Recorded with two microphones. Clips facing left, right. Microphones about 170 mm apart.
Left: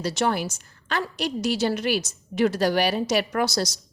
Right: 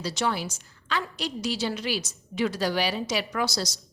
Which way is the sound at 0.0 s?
50° left (ahead or behind).